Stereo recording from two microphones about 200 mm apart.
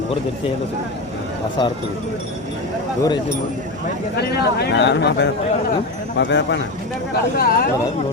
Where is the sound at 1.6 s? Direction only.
25° left (ahead or behind).